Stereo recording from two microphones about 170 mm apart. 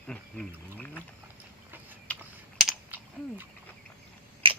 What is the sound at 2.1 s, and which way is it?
Typing, 5° left (ahead or behind).